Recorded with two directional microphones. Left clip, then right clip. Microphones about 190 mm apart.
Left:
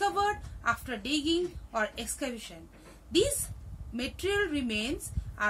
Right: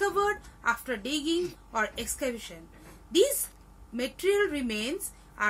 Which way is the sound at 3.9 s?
10° left (ahead or behind).